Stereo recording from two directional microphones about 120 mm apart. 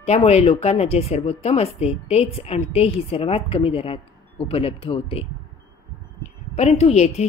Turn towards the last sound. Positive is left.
turn(degrees=65)  # may be behind; listen again after turning